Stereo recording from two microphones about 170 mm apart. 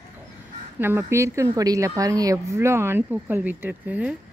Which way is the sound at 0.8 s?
15° right (ahead or behind).